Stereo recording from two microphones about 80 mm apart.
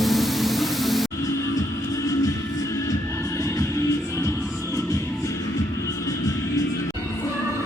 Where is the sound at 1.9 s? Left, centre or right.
Left.